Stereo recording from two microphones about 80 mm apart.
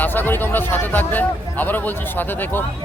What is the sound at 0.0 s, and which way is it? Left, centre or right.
Speech, left.